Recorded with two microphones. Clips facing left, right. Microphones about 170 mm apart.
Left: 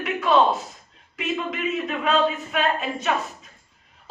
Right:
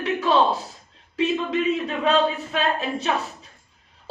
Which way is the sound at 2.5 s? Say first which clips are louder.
Even; 30° right (ahead or behind).